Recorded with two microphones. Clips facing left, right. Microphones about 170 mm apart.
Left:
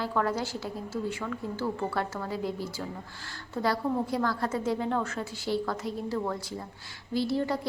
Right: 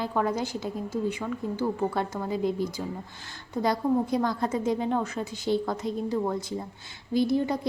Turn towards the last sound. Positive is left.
turn(degrees=-20)  # may be behind; listen again after turning